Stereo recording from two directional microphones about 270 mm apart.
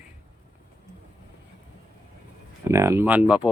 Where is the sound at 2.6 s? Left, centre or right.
Centre.